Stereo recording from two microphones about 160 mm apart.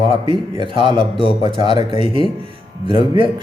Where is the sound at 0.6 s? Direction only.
30° right (ahead or behind).